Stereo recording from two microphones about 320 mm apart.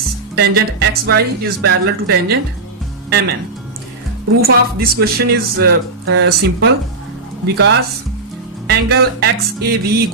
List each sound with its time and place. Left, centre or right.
0.3 s speech: right
4.4 s speech: right